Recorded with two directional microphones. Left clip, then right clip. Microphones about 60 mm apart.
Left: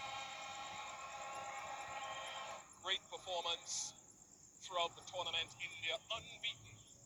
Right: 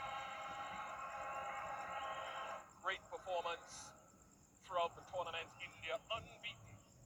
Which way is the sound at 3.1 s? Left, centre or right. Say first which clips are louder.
Left 1 dB; right.